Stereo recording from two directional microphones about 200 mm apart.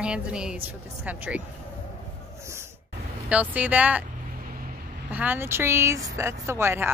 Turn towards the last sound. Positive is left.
turn(degrees=-10)  # may be behind; listen again after turning